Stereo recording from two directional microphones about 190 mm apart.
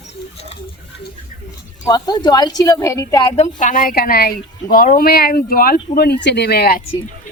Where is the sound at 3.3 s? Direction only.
40° left (ahead or behind); by 6.8 s 55° left (ahead or behind).